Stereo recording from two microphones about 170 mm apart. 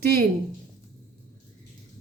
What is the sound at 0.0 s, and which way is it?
Speech, 70° right (ahead or behind).